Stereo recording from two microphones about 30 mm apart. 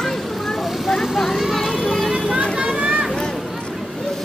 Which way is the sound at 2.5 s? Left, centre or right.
Right.